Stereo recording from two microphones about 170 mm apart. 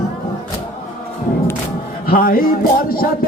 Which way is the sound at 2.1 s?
60° left (ahead or behind).